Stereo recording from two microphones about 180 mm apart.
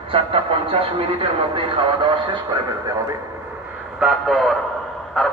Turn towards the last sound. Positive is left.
turn(degrees=5)  # may be behind; listen again after turning